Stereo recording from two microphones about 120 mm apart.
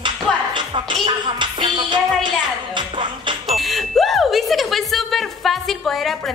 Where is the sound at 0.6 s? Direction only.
45° right (ahead or behind).